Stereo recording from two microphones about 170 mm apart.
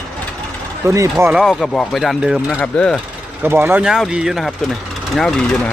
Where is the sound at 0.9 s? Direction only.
15° right (ahead or behind).